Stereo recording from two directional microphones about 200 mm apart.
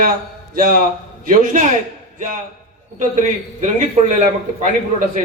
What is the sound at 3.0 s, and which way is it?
Speech, 40° right (ahead or behind).